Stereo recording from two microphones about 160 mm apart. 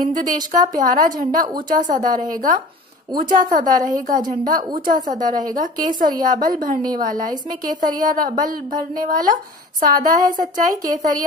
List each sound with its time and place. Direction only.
0.1 s a woman's voice: 55° right (ahead or behind)